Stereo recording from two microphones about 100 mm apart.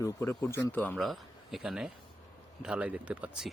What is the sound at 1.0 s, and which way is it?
Speech, centre (ahead or behind).